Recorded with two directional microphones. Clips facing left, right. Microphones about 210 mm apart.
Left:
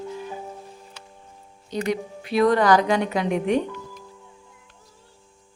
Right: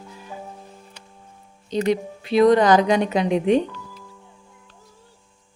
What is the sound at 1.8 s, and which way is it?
A woman's voice, 25° right (ahead or behind).